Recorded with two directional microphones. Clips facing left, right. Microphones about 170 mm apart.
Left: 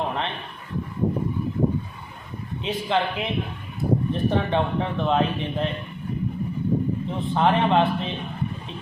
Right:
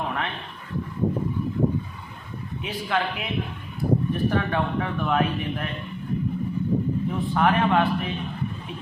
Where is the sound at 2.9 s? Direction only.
25° left (ahead or behind).